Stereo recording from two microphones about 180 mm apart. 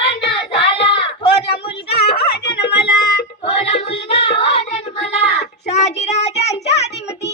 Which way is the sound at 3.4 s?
35° left (ahead or behind).